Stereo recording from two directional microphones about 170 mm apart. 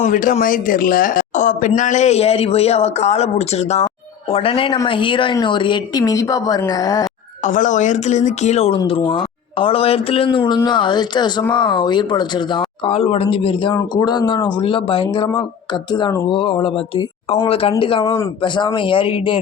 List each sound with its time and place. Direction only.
0.0 s speech: 50° left (ahead or behind); by 7.1 s 20° left (ahead or behind)
7.4 s speech: 45° left (ahead or behind)
8.8 s speech: 25° left (ahead or behind)